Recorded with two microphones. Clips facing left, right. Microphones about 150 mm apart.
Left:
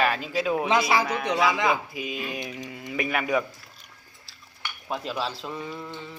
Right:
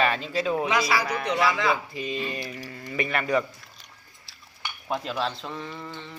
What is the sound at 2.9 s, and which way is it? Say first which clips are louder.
Speech: even; 5° left (ahead or behind).